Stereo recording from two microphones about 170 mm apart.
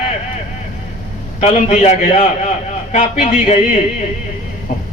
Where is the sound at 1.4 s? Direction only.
40° left (ahead or behind).